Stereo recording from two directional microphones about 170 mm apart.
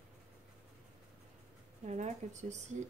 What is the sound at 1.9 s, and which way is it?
Speech, 45° right (ahead or behind).